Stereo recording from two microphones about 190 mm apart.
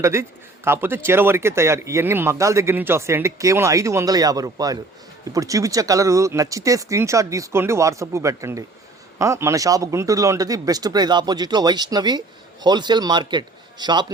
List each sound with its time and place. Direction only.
0.0 s a man's voice: 15° right (ahead or behind)